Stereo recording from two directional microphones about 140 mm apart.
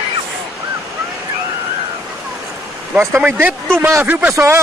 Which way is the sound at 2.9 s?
15° right (ahead or behind).